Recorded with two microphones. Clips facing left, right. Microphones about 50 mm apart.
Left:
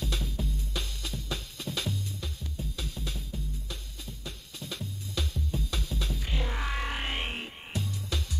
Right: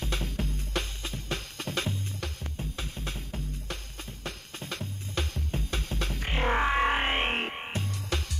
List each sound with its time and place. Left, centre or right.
0.0 s music: right
6.6 s music: right